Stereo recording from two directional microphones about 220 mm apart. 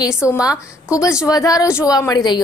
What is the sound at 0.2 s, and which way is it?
Speech, 15° left (ahead or behind).